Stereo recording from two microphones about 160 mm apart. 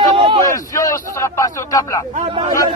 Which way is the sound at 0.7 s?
20° left (ahead or behind).